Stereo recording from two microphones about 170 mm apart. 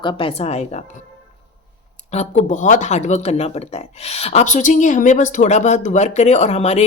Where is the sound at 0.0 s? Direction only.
30° left (ahead or behind).